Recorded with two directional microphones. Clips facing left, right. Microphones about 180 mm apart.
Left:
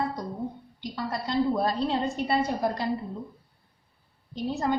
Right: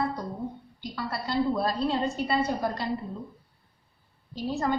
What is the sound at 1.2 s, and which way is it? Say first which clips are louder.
Speech: left 1 dB; 20° left (ahead or behind).